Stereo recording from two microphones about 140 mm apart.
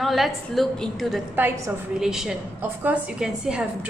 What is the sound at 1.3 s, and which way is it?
Speech, 15° right (ahead or behind).